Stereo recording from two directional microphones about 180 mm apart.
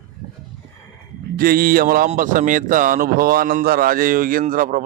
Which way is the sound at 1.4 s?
55° right (ahead or behind).